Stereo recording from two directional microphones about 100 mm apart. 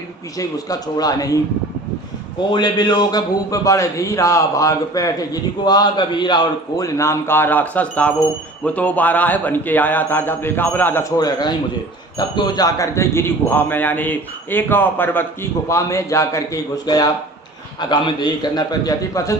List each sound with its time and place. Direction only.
0.3 s a man's voice: 40° left (ahead or behind)
2.5 s a man's voice: 45° left (ahead or behind)
6.8 s a man's voice: 30° left (ahead or behind)
11.2 s a man's voice: 45° left (ahead or behind)